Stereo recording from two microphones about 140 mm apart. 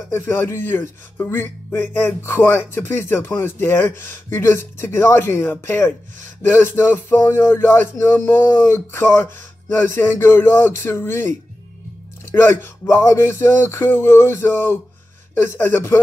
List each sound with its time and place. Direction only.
0.1 s speech: 15° left (ahead or behind)